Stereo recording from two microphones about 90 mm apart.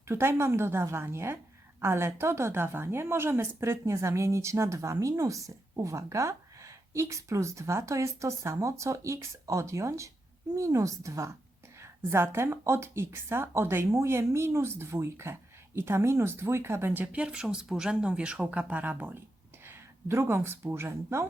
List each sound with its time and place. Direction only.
0.1 s a woman's voice: 30° right (ahead or behind)